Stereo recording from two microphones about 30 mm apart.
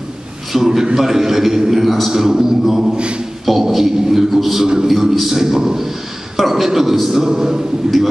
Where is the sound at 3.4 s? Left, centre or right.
Centre.